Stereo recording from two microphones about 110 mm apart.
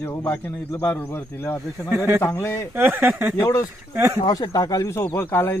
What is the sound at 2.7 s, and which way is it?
Speech, 20° right (ahead or behind).